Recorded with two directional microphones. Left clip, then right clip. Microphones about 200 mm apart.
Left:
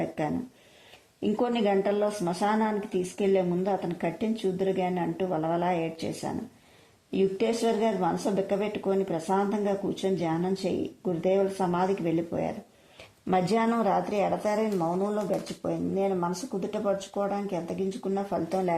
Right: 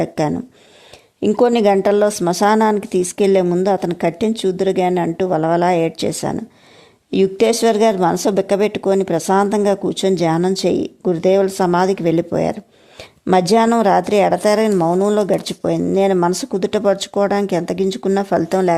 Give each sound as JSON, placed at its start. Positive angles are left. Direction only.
{"t": 1.2, "sound": "a woman's voice", "side_deg": -35}